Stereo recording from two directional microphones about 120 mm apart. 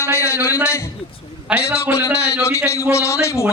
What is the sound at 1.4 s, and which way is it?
Speech, 10° right (ahead or behind).